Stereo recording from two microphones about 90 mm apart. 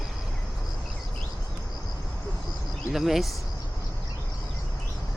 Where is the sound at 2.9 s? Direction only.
Centre (ahead or behind).